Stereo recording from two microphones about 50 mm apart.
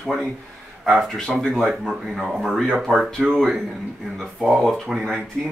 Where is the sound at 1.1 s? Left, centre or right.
Centre.